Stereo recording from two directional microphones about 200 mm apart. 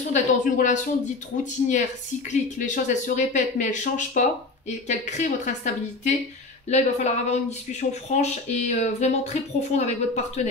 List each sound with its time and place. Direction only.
0.1 s speech: 40° left (ahead or behind)